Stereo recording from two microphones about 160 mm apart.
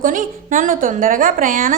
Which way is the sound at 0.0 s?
55° right (ahead or behind).